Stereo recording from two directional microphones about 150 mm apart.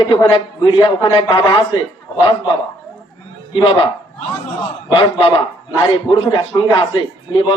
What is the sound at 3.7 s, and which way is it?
A man's voice, 40° left (ahead or behind).